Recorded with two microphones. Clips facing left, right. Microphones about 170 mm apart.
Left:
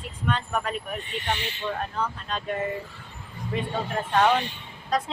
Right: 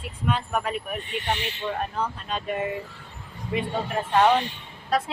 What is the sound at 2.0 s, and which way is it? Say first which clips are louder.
Speech: right 1 dB; 10° right (ahead or behind).